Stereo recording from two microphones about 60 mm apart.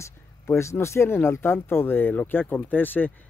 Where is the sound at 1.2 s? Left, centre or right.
Left.